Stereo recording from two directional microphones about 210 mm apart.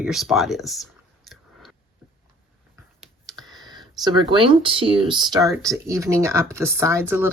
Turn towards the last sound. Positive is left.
turn(degrees=-10)  # may be behind; listen again after turning